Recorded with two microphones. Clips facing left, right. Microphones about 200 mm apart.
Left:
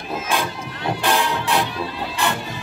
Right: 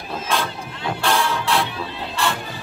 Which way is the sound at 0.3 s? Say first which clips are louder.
Right 1 dB; 15° left (ahead or behind).